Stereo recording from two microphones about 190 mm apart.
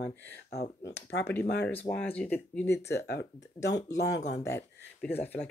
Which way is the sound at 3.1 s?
60° left (ahead or behind).